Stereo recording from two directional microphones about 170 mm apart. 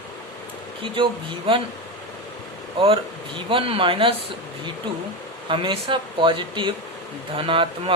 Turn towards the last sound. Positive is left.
turn(degrees=-30)  # may be behind; listen again after turning